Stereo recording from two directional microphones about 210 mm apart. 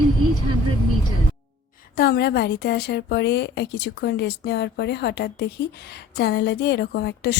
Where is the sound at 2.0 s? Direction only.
50° left (ahead or behind).